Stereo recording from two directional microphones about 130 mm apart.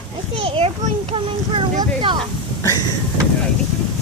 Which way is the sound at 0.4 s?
45° right (ahead or behind).